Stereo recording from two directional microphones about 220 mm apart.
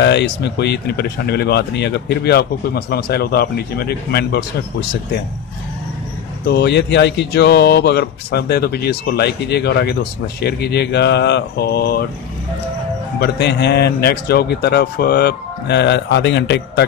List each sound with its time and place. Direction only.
0.0 s speech: 50° left (ahead or behind)
6.4 s speech: 50° left (ahead or behind)
13.2 s speech: 50° left (ahead or behind)